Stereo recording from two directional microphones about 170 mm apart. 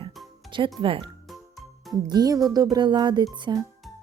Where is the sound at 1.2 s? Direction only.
Centre (ahead or behind).